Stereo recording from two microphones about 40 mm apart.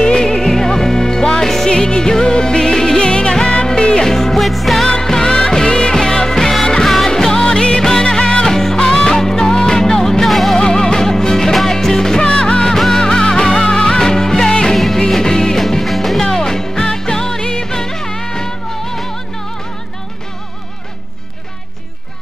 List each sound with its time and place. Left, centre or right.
0.0 s music: centre
4.1 s music: centre
5.0 s music: centre
10.2 s music: centre
10.6 s music: centre
12.3 s music: left
12.7 s music: centre
13.0 s music: left
14.7 s music: centre
15.6 s music: centre
16.3 s music: centre